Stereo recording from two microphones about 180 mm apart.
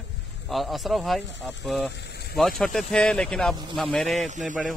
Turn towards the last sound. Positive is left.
turn(degrees=-45)  # may be behind; listen again after turning